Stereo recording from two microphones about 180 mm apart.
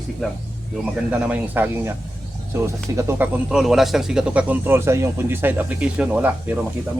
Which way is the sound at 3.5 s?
Centre (ahead or behind).